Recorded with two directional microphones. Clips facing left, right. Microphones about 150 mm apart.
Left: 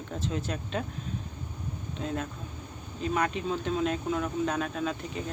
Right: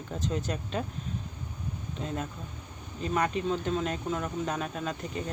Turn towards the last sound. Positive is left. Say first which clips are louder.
# left 2 dB
turn(degrees=0)  # may be behind; listen again after turning